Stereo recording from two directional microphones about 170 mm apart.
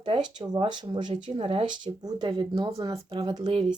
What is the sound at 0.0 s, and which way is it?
Speech, 25° right (ahead or behind).